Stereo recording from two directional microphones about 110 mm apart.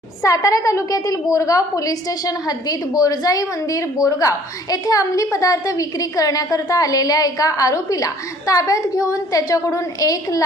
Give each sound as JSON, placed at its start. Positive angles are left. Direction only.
{"t": 0.2, "sound": "a woman's voice", "side_deg": 30}